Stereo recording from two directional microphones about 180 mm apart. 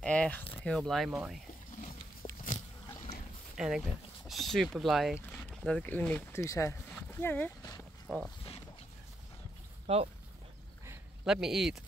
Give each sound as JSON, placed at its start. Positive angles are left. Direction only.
{"t": 0.0, "sound": "a sound", "side_deg": 5}
{"t": 0.7, "sound": "speech", "side_deg": 0}
{"t": 2.2, "sound": "a sound", "side_deg": 30}
{"t": 3.5, "sound": "speech", "side_deg": -5}
{"t": 9.9, "sound": "speech", "side_deg": -35}
{"t": 11.2, "sound": "speech", "side_deg": 0}